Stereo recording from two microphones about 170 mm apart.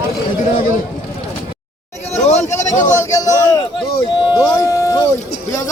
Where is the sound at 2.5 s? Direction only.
15° left (ahead or behind).